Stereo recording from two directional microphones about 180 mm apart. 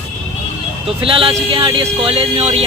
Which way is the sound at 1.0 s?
30° right (ahead or behind).